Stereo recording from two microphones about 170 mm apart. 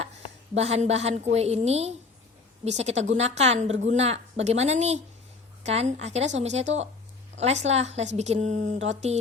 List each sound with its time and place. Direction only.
0.5 s a woman's voice: 40° right (ahead or behind)